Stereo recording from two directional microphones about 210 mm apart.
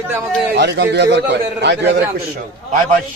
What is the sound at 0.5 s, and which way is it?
A man's voice, 55° right (ahead or behind).